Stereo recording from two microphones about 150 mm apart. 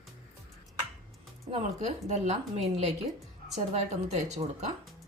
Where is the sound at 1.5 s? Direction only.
50° right (ahead or behind).